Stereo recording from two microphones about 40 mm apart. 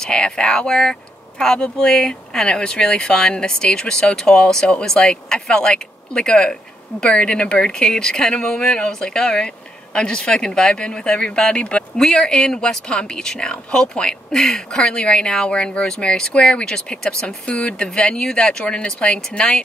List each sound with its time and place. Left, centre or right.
0.0 s speech: left
17.5 s speech: left
17.8 s speech: centre